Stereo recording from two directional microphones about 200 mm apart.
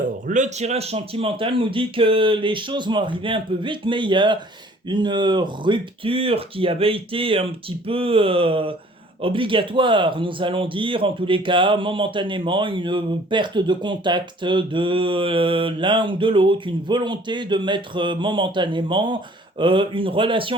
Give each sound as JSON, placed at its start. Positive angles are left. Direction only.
{"t": 0.3, "sound": "a man's voice", "side_deg": -35}